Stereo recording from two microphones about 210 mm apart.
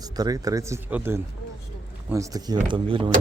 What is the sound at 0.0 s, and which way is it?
Speech, 20° right (ahead or behind).